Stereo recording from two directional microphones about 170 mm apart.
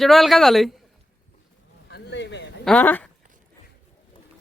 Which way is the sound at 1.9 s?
90° left.